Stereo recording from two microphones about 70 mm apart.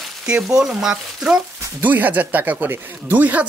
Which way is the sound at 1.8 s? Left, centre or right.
Right.